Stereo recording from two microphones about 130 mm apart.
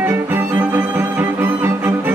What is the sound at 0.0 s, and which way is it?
Music, 15° right (ahead or behind).